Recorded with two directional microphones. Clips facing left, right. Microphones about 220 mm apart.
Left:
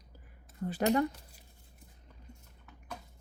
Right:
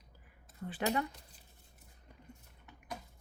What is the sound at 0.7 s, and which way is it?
Speech, 40° left (ahead or behind).